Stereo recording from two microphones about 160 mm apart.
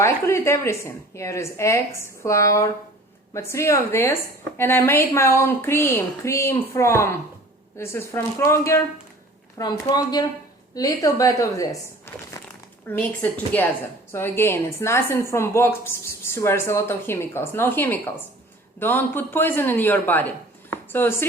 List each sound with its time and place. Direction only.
0.0 s a woman's voice: 15° left (ahead or behind)
12.9 s a woman's voice: 10° left (ahead or behind)